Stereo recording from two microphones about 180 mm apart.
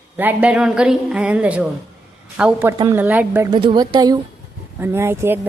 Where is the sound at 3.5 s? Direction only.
25° right (ahead or behind).